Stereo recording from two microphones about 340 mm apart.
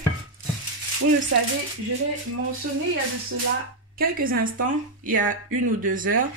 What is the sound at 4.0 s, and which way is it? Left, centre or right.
Speech, right.